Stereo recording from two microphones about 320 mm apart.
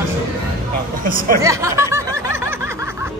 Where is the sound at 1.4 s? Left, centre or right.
Centre.